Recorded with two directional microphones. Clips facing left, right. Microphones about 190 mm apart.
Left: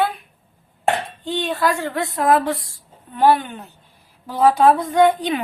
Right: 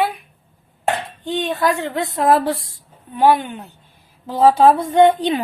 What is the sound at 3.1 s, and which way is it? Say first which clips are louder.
Speech: right 1 dB; 10° right (ahead or behind).